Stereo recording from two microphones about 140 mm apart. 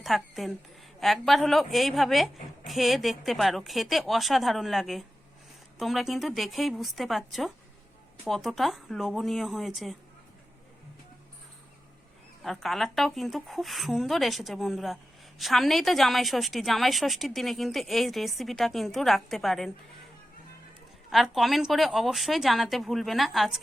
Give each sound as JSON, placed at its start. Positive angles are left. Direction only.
{"t": 0.0, "sound": "a woman's voice", "side_deg": 0}
{"t": 12.4, "sound": "a woman's voice", "side_deg": 0}
{"t": 21.1, "sound": "a woman's voice", "side_deg": 0}